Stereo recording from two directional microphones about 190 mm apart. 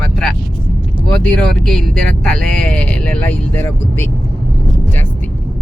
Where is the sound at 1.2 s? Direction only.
5° left (ahead or behind).